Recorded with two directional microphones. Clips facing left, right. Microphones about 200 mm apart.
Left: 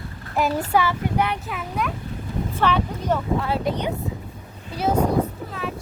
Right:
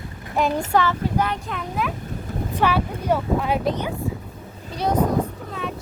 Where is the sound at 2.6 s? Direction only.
10° right (ahead or behind).